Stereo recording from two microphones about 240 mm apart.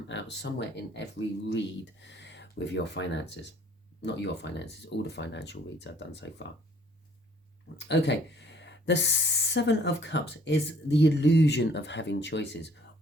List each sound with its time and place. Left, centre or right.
0.1 s speech: left
1.5 s speech: left
7.9 s speech: left